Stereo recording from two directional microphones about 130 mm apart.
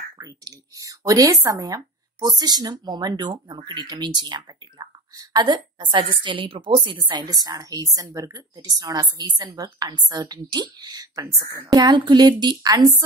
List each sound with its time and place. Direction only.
0.2 s speech: 25° right (ahead or behind)